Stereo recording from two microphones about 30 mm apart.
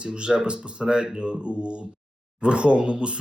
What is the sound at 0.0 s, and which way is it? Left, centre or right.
Speech, right.